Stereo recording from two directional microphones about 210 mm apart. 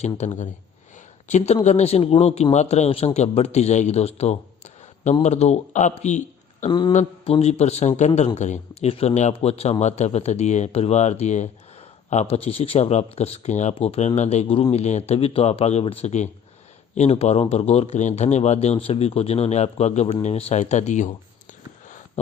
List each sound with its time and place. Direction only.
0.2 s a man's voice: 30° left (ahead or behind)
6.7 s a man's voice: 20° left (ahead or behind)